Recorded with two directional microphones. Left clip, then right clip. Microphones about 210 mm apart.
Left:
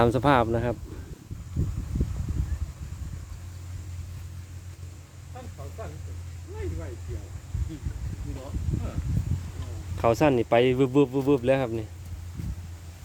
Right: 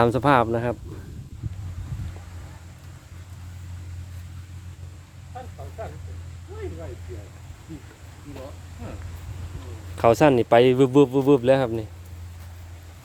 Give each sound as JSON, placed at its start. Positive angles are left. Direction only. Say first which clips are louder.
{"t": 0.0, "sound": "speech", "louder": "right 3 dB", "side_deg": -5}
{"t": 10.0, "sound": "speech", "louder": "right 5 dB", "side_deg": -15}